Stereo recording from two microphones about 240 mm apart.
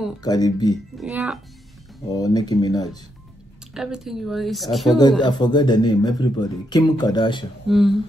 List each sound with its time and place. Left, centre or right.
0.2 s speech: centre
0.9 s speech: centre
2.1 s speech: centre
3.7 s speech: centre
5.2 s speech: centre
7.6 s speech: centre